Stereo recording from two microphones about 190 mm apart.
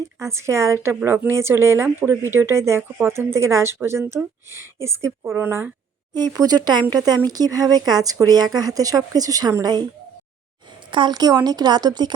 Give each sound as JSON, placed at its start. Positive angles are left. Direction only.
{"t": 0.2, "sound": "a woman's voice", "side_deg": -15}